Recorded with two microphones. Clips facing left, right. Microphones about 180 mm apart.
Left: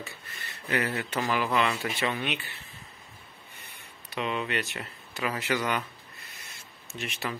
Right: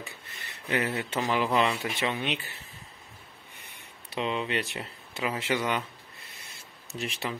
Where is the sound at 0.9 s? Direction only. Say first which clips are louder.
Right 1 dB; 25° right (ahead or behind).